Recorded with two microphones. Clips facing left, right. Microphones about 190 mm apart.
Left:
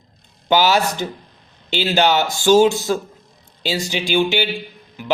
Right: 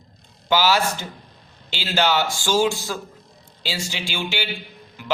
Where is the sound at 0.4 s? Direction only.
20° left (ahead or behind).